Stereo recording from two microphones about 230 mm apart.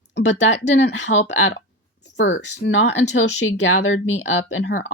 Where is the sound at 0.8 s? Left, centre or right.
Left.